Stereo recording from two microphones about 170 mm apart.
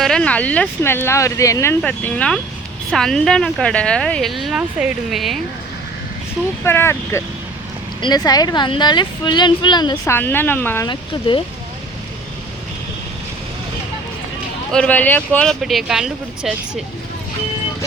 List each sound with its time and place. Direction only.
0.0 s speech: 5° left (ahead or behind)
1.8 s speech: 5° left (ahead or behind)
6.7 s speech: 15° left (ahead or behind)
10.1 s speech: 10° left (ahead or behind)
10.8 s speech: 30° left (ahead or behind)
14.7 s speech: 5° left (ahead or behind)